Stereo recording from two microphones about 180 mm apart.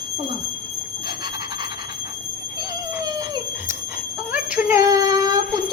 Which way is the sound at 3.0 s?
20° right (ahead or behind).